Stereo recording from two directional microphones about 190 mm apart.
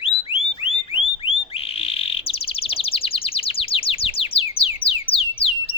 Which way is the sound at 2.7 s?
30° left (ahead or behind).